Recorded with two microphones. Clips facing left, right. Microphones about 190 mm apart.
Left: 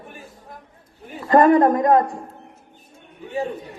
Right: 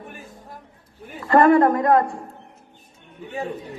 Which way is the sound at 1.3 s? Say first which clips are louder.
Left 1 dB; 20° left (ahead or behind).